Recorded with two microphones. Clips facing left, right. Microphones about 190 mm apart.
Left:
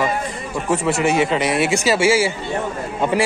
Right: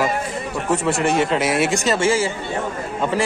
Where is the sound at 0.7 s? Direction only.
Centre (ahead or behind).